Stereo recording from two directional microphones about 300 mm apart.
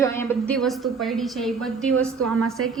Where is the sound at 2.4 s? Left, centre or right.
Right.